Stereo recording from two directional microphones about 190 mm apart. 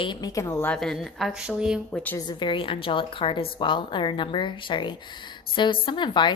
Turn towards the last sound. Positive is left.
turn(degrees=25)  # may be behind; listen again after turning